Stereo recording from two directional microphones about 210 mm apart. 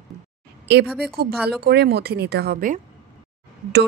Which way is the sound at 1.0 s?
45° right (ahead or behind).